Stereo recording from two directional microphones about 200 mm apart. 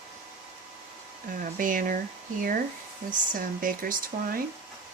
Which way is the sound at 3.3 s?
45° right (ahead or behind).